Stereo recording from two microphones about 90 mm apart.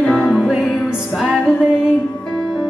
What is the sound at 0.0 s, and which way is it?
Music, 5° left (ahead or behind).